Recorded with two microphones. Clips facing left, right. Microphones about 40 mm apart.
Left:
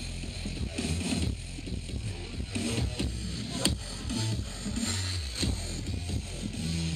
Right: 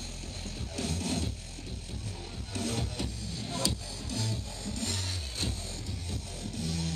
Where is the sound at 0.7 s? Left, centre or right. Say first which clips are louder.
Left 1 dB; left.